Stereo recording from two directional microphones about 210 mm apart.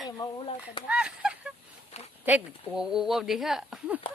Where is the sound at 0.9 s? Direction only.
5° right (ahead or behind).